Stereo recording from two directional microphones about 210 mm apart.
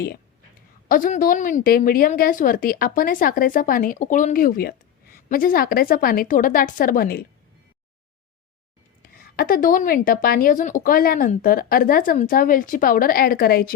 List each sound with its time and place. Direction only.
0.9 s a woman's voice: 40° left (ahead or behind)
9.0 s a woman's voice: 45° left (ahead or behind)